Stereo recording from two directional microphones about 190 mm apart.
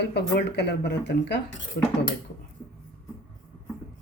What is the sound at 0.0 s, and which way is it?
Speech, 60° left (ahead or behind).